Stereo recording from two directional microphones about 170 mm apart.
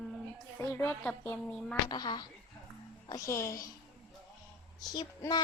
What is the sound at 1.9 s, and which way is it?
Speech, 25° left (ahead or behind).